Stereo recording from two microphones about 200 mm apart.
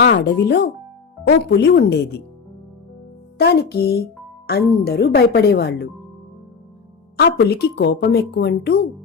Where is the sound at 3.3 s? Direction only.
55° left (ahead or behind).